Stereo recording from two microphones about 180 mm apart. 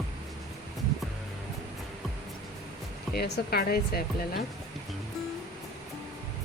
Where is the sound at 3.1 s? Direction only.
65° left (ahead or behind).